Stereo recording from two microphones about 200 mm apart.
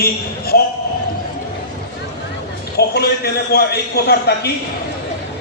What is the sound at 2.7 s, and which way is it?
A man's voice, 50° left (ahead or behind).